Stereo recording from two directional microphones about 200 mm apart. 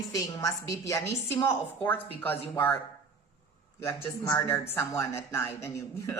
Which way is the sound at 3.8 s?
15° left (ahead or behind).